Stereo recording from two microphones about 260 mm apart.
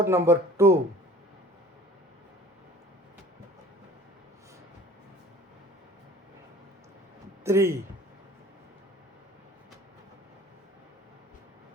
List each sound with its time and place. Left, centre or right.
0.0 s speech: centre
7.4 s speech: centre